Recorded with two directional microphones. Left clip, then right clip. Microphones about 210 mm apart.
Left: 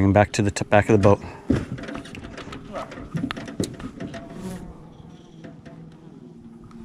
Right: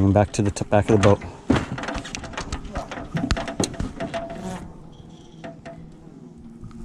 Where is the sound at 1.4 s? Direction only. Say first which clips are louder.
Right 3 dB; 25° right (ahead or behind).